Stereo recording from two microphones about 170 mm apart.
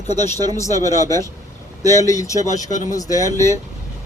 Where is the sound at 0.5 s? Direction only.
15° left (ahead or behind).